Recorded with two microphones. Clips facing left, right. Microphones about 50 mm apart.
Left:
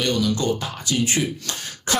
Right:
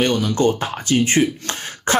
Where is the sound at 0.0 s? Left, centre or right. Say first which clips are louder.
Right 5 dB; right.